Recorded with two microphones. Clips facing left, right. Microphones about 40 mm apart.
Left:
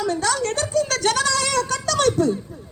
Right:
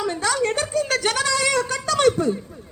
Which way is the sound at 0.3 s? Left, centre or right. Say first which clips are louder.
Right 1 dB; centre.